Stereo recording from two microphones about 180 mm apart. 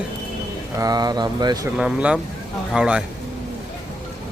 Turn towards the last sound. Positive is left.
turn(degrees=-5)  # may be behind; listen again after turning